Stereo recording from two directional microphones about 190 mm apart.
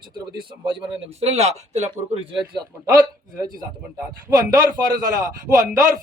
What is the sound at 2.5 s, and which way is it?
Speech, 20° right (ahead or behind).